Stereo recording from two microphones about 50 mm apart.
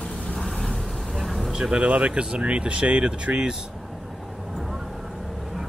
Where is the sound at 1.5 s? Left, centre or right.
Centre.